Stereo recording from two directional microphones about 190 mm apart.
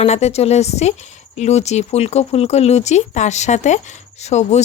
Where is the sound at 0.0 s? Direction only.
35° left (ahead or behind).